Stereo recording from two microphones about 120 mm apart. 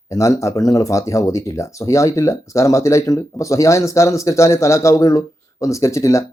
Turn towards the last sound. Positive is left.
turn(degrees=25)  # may be behind; listen again after turning